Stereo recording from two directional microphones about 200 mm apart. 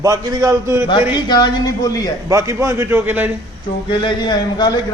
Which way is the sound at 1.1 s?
20° left (ahead or behind).